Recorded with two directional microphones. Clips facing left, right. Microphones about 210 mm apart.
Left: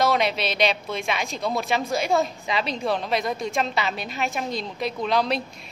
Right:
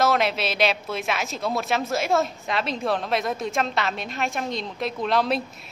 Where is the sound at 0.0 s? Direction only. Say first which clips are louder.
Even; centre (ahead or behind).